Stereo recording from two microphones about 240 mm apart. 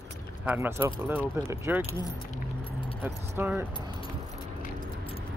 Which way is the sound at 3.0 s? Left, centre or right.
Centre.